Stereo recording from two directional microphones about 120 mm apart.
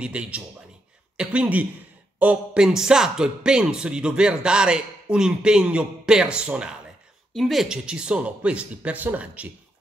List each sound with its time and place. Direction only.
0.0 s speech: 10° right (ahead or behind)